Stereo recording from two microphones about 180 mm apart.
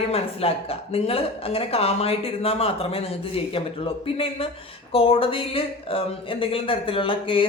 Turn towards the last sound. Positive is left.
turn(degrees=30)  # may be behind; listen again after turning